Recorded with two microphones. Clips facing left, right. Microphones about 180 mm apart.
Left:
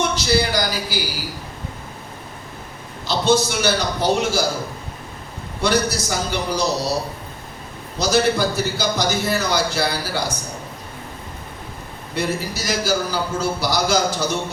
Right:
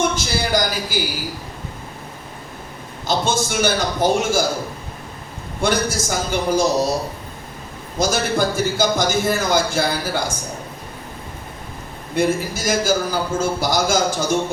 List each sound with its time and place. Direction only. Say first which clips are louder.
0.0 s a sound: left 2 dB; 50° right (ahead or behind)
3.1 s a man's voice: left 2 dB; 50° right (ahead or behind)
5.5 s a man's voice: even; 50° right (ahead or behind)
7.9 s a man's voice: left 1 dB; 50° right (ahead or behind)
12.1 s a man's voice: right 4 dB; 50° right (ahead or behind)